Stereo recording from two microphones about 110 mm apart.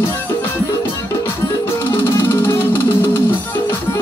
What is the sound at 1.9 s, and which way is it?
Music, 20° left (ahead or behind).